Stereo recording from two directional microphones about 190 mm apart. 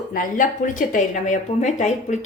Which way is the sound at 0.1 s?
45° left (ahead or behind).